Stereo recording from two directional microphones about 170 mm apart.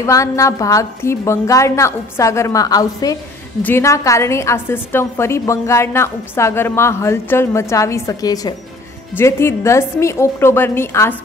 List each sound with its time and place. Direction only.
0.0 s a woman's voice: 20° left (ahead or behind)